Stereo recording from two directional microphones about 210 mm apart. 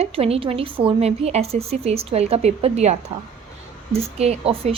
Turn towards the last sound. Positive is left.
turn(degrees=-30)  # may be behind; listen again after turning